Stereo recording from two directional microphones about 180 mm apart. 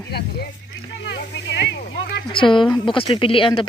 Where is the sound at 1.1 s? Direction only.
75° left (ahead or behind).